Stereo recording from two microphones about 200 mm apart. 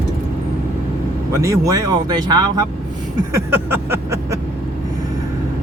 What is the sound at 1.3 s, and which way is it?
Speech, 15° right (ahead or behind).